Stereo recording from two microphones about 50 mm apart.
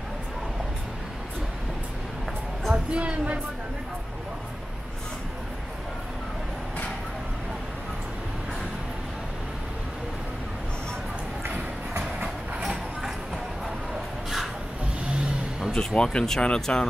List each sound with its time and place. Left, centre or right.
2.9 s speech: right
11.4 s music: right
12.2 s train: right
15.0 s vehicle: centre
15.7 s speech: centre